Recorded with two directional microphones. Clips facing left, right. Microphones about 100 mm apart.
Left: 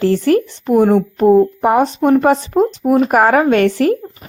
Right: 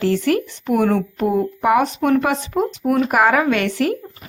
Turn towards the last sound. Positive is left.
turn(degrees=40)  # may be behind; listen again after turning